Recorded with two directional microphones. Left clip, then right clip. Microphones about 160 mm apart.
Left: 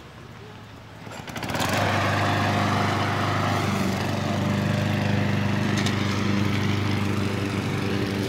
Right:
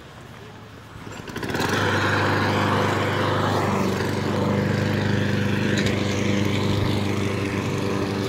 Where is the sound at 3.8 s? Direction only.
35° left (ahead or behind).